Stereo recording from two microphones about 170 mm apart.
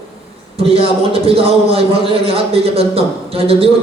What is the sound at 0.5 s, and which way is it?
A man's voice, 35° right (ahead or behind).